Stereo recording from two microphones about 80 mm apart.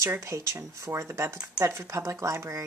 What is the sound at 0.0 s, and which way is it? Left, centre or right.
Speech, right.